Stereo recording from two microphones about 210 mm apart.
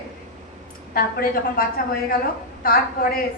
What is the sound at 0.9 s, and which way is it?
A woman's voice, 45° left (ahead or behind).